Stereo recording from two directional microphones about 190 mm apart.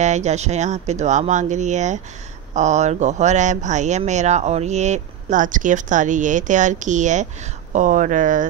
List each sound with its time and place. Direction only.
0.0 s speech: 35° right (ahead or behind)